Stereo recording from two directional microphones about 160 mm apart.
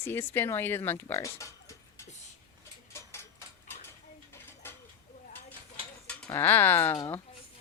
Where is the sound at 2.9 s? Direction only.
15° left (ahead or behind).